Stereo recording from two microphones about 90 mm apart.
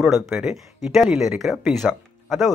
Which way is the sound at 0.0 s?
5° right (ahead or behind).